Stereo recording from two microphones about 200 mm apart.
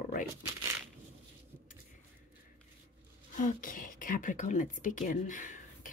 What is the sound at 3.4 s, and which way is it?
Speech, 40° left (ahead or behind).